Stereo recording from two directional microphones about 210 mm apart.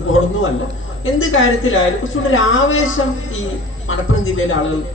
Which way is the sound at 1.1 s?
70° left (ahead or behind).